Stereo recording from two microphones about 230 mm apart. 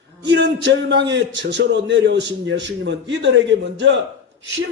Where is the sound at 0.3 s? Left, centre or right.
Right.